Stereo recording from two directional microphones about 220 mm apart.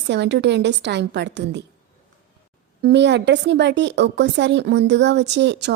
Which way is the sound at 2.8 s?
50° right (ahead or behind).